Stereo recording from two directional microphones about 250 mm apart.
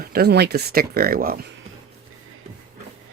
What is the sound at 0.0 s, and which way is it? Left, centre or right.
Speech, right.